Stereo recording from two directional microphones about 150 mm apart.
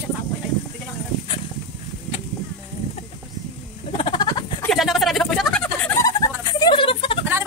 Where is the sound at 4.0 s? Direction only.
30° left (ahead or behind).